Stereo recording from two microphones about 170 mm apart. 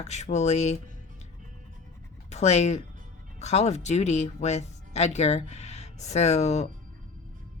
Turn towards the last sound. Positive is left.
turn(degrees=40)  # may be behind; listen again after turning